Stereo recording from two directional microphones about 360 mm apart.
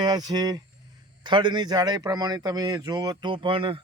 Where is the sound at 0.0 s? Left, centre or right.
Centre.